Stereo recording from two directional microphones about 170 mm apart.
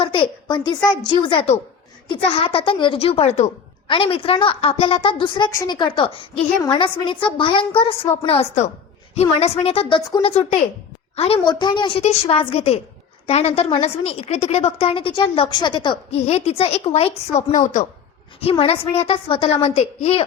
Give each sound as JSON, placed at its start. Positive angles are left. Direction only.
{"t": 0.0, "sound": "a woman's voice", "side_deg": 30}